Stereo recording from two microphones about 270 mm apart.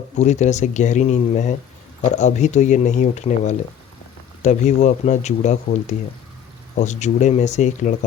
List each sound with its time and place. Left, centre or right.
0.2 s speech: left